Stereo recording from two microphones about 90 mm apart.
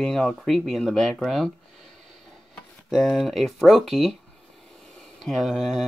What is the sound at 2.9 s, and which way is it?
Speech, centre (ahead or behind).